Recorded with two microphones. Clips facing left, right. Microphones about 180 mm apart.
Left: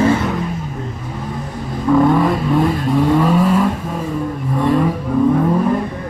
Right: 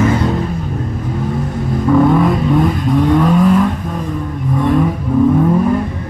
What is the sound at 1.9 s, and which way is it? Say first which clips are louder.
Vehicle: right 1 dB; centre (ahead or behind).